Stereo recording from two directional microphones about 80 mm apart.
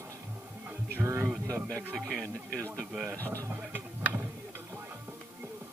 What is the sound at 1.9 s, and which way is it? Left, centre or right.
Speech, centre.